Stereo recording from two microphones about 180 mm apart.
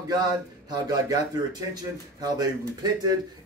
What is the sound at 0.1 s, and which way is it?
Speech, 20° right (ahead or behind).